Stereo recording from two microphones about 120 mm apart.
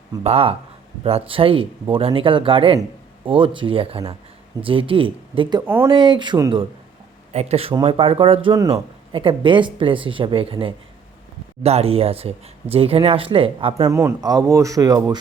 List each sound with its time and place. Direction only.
0.2 s speech: 55° right (ahead or behind)
5.6 s speech: 15° right (ahead or behind)
5.9 s speech: 40° right (ahead or behind)
7.3 s speech: 60° right (ahead or behind)
13.8 s speech: 25° right (ahead or behind)